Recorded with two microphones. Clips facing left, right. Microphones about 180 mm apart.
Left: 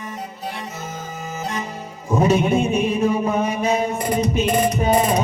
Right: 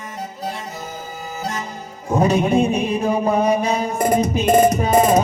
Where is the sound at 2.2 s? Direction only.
35° right (ahead or behind).